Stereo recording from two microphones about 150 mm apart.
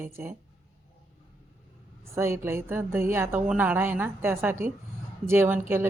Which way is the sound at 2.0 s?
15° right (ahead or behind).